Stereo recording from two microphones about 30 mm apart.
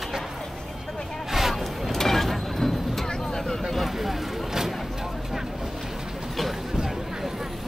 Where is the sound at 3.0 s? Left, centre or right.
Left.